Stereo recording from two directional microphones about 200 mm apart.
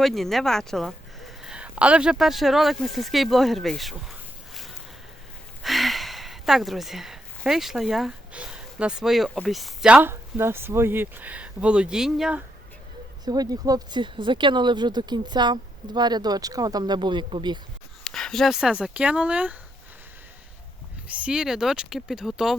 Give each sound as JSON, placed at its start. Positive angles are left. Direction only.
{"t": 0.0, "sound": "speech", "side_deg": 0}
{"t": 5.6, "sound": "speech", "side_deg": 0}
{"t": 13.2, "sound": "speech", "side_deg": -20}
{"t": 18.0, "sound": "speech", "side_deg": 5}
{"t": 21.2, "sound": "speech", "side_deg": -5}